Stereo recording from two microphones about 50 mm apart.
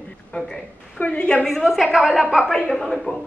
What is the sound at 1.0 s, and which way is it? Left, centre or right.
Speech, left.